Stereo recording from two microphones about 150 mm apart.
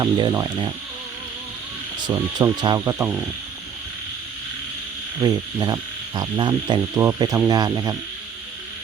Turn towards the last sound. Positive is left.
turn(degrees=-25)  # may be behind; listen again after turning